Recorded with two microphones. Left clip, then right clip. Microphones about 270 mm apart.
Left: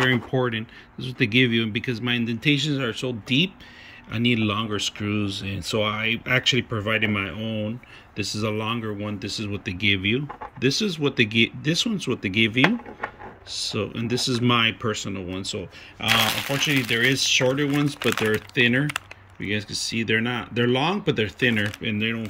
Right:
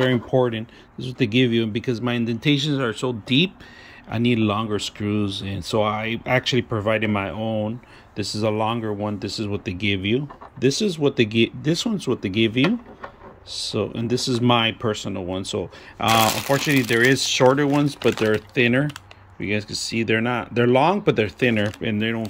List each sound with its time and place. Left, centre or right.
0.0 s speech: centre
16.0 s speech: right
17.1 s speech: centre